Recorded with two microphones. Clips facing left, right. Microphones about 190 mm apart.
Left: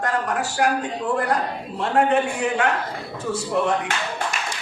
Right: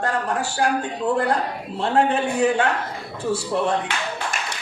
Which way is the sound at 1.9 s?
30° right (ahead or behind).